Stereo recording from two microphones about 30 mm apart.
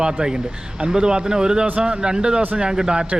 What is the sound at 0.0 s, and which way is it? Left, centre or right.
Speech, right.